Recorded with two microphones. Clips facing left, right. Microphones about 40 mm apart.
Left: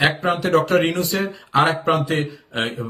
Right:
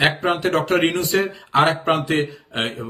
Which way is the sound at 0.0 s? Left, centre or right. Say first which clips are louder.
Even; right.